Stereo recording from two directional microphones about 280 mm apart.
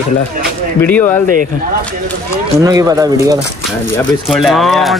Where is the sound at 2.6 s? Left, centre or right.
Centre.